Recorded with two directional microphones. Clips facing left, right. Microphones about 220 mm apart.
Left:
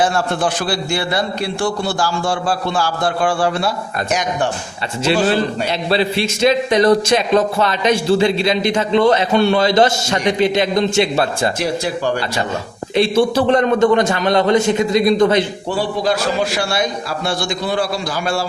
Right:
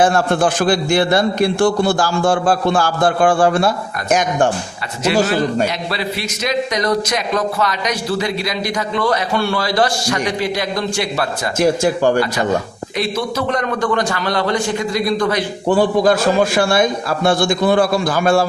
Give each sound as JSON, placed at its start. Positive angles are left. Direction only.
{"t": 0.0, "sound": "a man's voice", "side_deg": -50}
{"t": 5.9, "sound": "speech", "side_deg": 30}
{"t": 11.6, "sound": "a man's voice", "side_deg": -50}
{"t": 13.0, "sound": "speech", "side_deg": 30}
{"t": 15.7, "sound": "a man's voice", "side_deg": -50}